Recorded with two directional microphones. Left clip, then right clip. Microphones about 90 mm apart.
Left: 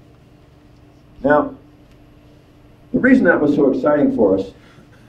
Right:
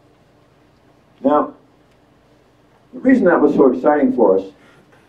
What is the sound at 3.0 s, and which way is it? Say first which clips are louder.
Speech: right 1 dB; 50° left (ahead or behind).